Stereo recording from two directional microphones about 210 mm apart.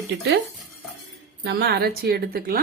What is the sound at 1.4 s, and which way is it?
A woman's voice, 50° right (ahead or behind).